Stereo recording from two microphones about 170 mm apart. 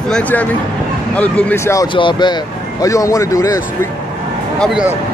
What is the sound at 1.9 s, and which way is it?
Speech, 25° left (ahead or behind).